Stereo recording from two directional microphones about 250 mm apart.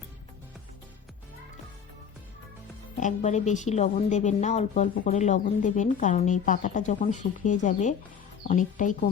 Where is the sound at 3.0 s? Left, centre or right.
Left.